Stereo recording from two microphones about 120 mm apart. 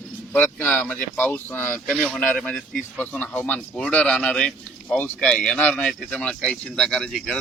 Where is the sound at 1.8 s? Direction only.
5° left (ahead or behind).